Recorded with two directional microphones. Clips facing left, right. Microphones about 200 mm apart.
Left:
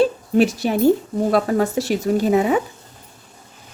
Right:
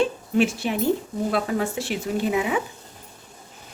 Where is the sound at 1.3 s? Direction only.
40° left (ahead or behind).